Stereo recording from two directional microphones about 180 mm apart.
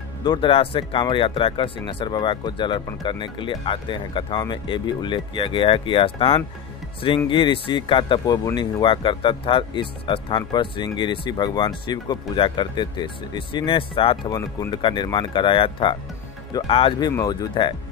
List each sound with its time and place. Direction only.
0.2 s speech: 25° left (ahead or behind)